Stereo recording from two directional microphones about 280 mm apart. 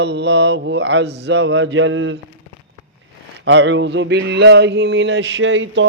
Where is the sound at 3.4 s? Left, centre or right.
Right.